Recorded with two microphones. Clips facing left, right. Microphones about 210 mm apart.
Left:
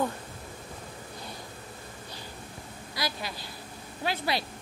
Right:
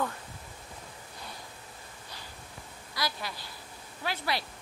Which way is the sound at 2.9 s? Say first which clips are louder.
Left 1 dB; 15° left (ahead or behind).